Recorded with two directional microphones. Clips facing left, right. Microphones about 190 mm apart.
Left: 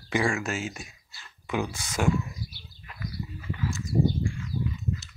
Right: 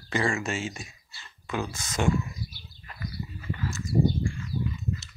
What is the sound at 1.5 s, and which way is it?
Speech, 15° left (ahead or behind).